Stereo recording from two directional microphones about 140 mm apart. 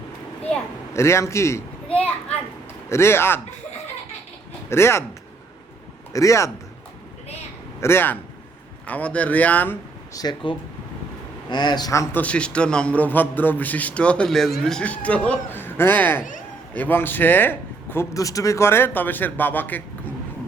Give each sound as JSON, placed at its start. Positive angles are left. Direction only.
{"t": 0.9, "sound": "a man's voice", "side_deg": 20}
{"t": 4.7, "sound": "speech", "side_deg": 20}
{"t": 6.1, "sound": "speech", "side_deg": 20}
{"t": 7.8, "sound": "a man's voice", "side_deg": 15}
{"t": 10.2, "sound": "speech", "side_deg": 30}
{"t": 12.2, "sound": "a man's voice", "side_deg": 10}